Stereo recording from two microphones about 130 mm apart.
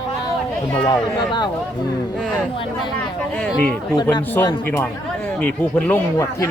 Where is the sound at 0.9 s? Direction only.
35° left (ahead or behind).